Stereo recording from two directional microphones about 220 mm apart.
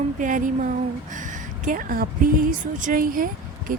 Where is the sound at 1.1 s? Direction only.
35° right (ahead or behind).